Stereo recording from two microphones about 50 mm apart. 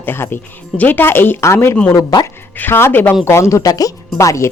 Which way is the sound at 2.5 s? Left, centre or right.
Left.